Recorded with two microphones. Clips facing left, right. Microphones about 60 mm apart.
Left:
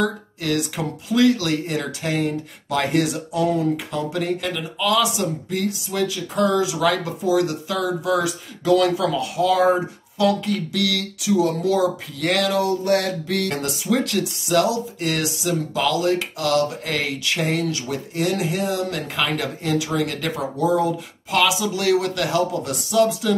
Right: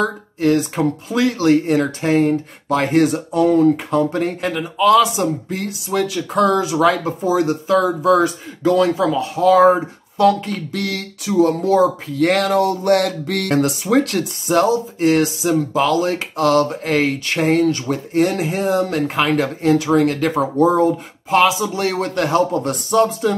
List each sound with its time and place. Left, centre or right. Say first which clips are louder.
0.0 s speech: right 6 dB; right
12.2 s a sound: right 5 dB; right
14.5 s speech: right 4 dB; right